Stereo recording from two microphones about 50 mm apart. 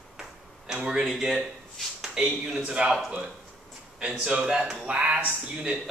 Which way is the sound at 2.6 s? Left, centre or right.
Centre.